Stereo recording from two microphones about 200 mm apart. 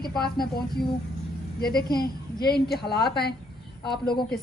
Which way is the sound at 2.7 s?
55° left (ahead or behind).